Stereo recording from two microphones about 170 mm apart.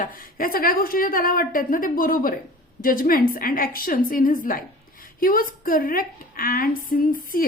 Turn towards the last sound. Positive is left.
turn(degrees=55)  # may be behind; listen again after turning